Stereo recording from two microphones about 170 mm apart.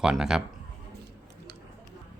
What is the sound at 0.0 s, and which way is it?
Speech, 5° right (ahead or behind).